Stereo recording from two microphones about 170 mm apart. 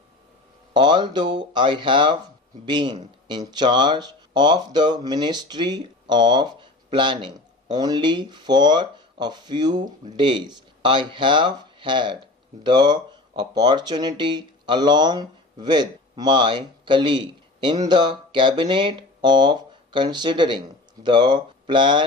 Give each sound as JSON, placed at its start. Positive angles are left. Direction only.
{"t": 0.7, "sound": "speech", "side_deg": -25}